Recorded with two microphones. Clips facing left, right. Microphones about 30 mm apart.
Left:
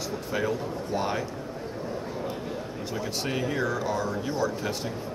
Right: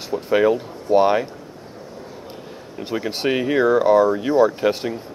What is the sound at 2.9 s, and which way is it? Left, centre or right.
Speech, right.